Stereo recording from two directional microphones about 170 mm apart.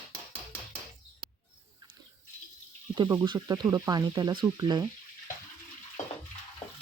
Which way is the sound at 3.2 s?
25° right (ahead or behind).